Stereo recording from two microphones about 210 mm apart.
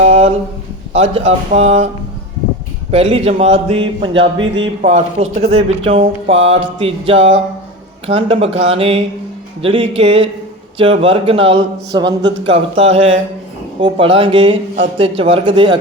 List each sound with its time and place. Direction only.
0.0 s speech: 30° right (ahead or behind)
2.9 s speech: 30° right (ahead or behind)